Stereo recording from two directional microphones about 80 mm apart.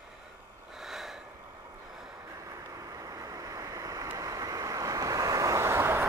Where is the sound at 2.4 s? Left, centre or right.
Right.